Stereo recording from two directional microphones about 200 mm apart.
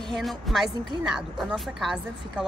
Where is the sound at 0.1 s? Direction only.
Centre (ahead or behind).